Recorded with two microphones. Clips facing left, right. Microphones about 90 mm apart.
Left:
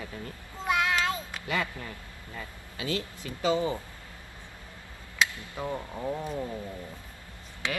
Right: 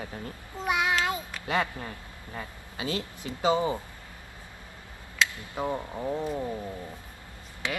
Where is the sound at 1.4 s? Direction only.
25° right (ahead or behind).